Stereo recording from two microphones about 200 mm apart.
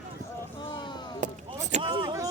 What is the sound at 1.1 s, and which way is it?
Chop, 35° right (ahead or behind).